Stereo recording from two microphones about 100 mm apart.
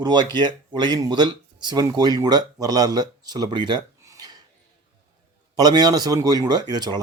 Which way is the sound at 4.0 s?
35° right (ahead or behind).